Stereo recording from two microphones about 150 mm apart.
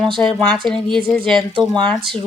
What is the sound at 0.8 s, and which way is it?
Speech, 30° right (ahead or behind).